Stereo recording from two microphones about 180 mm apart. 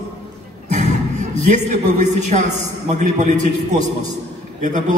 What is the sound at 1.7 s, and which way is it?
A woman's voice, 40° right (ahead or behind).